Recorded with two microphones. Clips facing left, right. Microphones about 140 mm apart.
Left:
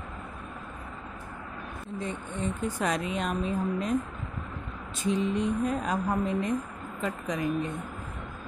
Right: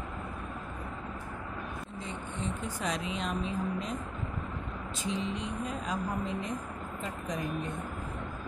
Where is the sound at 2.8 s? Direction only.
55° left (ahead or behind).